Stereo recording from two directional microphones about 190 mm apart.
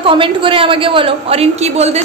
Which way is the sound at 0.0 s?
25° right (ahead or behind).